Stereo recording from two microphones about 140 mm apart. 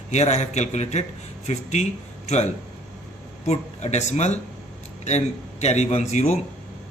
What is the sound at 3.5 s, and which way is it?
Speech, 55° left (ahead or behind).